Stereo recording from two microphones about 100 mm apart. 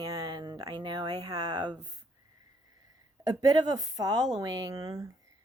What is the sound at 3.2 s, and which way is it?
A woman's voice, 40° right (ahead or behind).